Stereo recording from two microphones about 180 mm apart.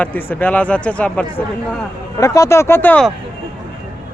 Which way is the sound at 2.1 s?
20° left (ahead or behind).